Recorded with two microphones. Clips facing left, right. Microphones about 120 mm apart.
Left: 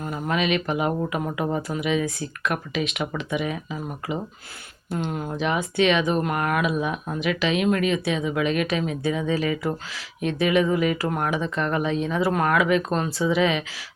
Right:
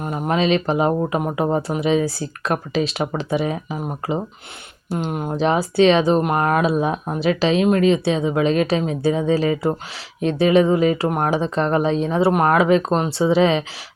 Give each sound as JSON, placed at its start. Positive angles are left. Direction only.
{"t": 0.0, "sound": "speech", "side_deg": -25}